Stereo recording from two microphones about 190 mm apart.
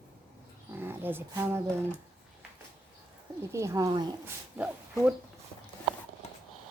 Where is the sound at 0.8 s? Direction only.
10° right (ahead or behind).